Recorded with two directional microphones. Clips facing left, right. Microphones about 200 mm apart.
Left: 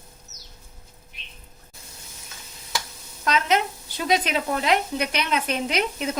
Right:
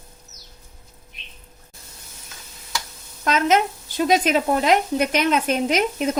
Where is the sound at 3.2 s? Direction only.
50° right (ahead or behind).